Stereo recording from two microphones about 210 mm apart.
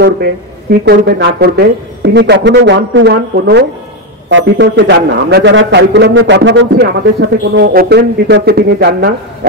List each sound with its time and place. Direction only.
0.0 s a man's voice: 50° right (ahead or behind)